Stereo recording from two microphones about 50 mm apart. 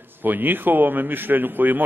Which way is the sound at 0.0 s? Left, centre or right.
Right.